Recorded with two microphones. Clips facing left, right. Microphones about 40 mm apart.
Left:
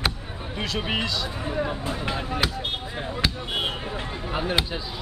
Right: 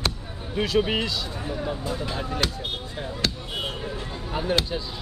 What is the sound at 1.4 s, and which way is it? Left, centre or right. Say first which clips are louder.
Speech: left 2 dB; left.